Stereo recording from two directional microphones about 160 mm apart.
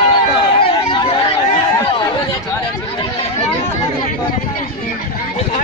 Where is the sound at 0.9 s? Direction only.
30° left (ahead or behind).